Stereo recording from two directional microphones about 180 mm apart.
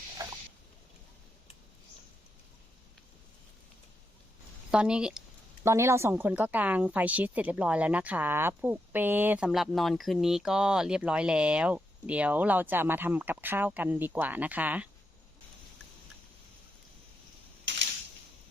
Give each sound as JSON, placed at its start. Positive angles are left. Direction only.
{"t": 4.7, "sound": "speech", "side_deg": -5}
{"t": 5.6, "sound": "speech", "side_deg": -15}